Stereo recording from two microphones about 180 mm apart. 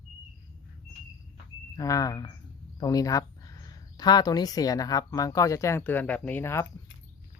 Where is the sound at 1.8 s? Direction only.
20° left (ahead or behind).